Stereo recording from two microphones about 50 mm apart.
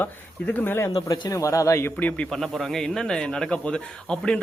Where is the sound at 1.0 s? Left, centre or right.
Left.